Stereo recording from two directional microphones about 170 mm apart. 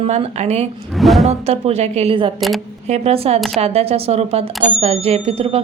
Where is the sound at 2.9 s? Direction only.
35° right (ahead or behind).